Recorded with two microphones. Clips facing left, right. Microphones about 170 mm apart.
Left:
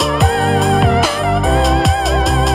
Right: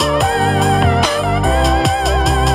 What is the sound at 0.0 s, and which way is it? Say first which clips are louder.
Music: even; centre (ahead or behind).